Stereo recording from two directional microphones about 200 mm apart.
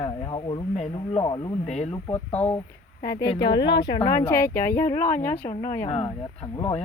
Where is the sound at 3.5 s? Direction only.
60° left (ahead or behind).